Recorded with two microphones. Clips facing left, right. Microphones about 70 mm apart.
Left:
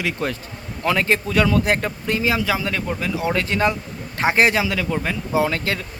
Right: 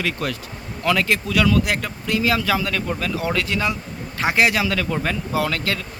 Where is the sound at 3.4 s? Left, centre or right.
Left.